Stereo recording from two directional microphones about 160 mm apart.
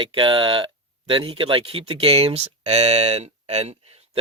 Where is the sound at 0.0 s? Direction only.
30° right (ahead or behind).